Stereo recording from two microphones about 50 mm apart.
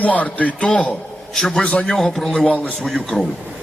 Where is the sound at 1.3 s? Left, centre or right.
Centre.